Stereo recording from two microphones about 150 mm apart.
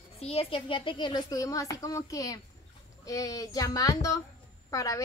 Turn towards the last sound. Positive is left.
turn(degrees=20)  # may be behind; listen again after turning